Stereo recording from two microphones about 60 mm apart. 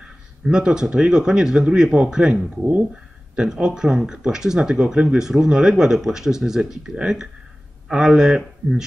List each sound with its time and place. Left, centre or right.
0.0 s speech: centre